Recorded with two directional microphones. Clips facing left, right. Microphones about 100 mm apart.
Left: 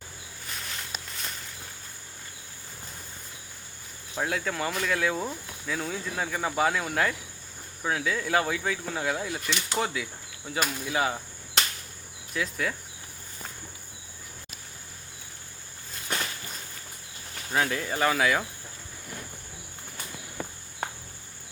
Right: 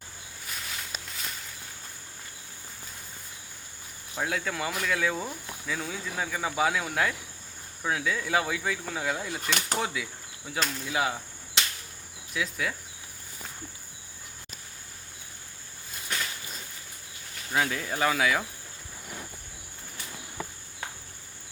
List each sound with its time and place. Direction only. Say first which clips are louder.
0.4 s a sound: even; centre (ahead or behind)
4.2 s speech: left 1 dB; centre (ahead or behind)
9.4 s speech: right 1 dB; 45° right (ahead or behind)
9.7 s speech: left 2 dB; centre (ahead or behind)
12.3 s speech: left 1 dB; centre (ahead or behind)
17.5 s speech: left 1 dB; centre (ahead or behind)